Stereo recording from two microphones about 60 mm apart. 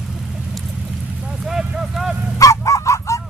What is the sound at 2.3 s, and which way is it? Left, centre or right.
Fowl, left.